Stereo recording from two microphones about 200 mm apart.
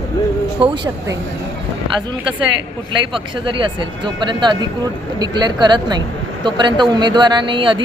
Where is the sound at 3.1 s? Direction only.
25° right (ahead or behind).